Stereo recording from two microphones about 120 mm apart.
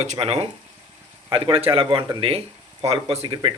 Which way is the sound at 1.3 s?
45° right (ahead or behind).